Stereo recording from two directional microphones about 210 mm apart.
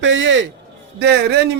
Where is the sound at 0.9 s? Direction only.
50° right (ahead or behind).